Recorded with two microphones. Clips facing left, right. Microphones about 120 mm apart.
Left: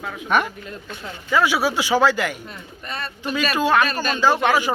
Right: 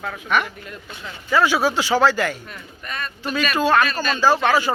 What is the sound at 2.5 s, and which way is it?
Speech, 30° left (ahead or behind).